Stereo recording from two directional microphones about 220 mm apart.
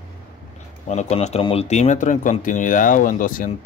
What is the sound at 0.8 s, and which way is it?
Speech, 30° left (ahead or behind).